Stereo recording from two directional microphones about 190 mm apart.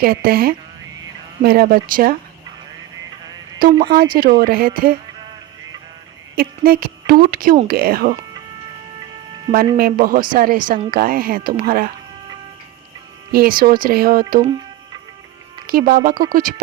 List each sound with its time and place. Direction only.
0.0 s a woman's voice: 50° right (ahead or behind)
3.6 s a woman's voice: 50° right (ahead or behind)
6.3 s a woman's voice: 50° right (ahead or behind)
9.7 s a woman's voice: 50° right (ahead or behind)
13.3 s a woman's voice: 50° right (ahead or behind)
15.6 s a woman's voice: 50° right (ahead or behind)